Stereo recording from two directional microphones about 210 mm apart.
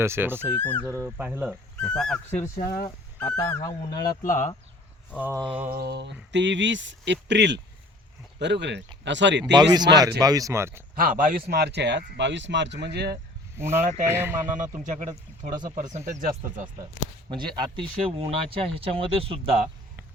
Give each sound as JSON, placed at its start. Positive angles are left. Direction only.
{"t": 0.0, "sound": "speech", "side_deg": -10}
{"t": 0.6, "sound": "speech", "side_deg": 10}
{"t": 0.9, "sound": "speech", "side_deg": -10}
{"t": 1.8, "sound": "speech", "side_deg": 5}
{"t": 2.6, "sound": "speech", "side_deg": 40}
{"t": 3.3, "sound": "speech", "side_deg": 15}
{"t": 4.2, "sound": "speech", "side_deg": 40}
{"t": 5.1, "sound": "speech", "side_deg": -5}
{"t": 5.7, "sound": "speech", "side_deg": -50}
{"t": 9.4, "sound": "speech", "side_deg": -20}
{"t": 10.9, "sound": "a man's voice", "side_deg": -40}
{"t": 13.6, "sound": "speech", "side_deg": -10}
{"t": 14.8, "sound": "speech", "side_deg": -35}
{"t": 17.2, "sound": "speech", "side_deg": -20}